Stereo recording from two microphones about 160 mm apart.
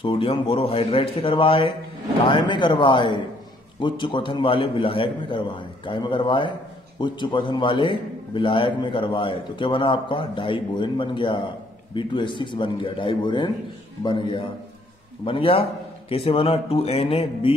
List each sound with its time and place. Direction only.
0.0 s a man's voice: 35° left (ahead or behind)